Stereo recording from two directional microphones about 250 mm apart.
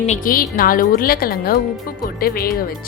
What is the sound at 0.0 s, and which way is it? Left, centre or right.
Speech, left.